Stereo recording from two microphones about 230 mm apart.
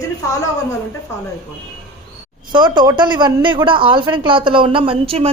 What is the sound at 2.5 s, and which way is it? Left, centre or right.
A woman's voice, centre.